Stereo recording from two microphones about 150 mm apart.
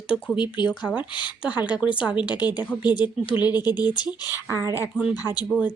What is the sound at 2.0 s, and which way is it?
Speech, 5° right (ahead or behind).